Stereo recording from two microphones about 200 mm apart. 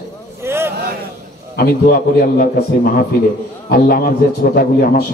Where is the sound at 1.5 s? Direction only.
50° left (ahead or behind).